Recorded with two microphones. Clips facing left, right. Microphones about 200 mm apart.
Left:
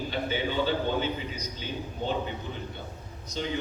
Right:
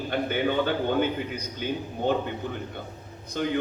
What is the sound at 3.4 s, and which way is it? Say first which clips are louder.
Speech: right 5 dB; 55° right (ahead or behind).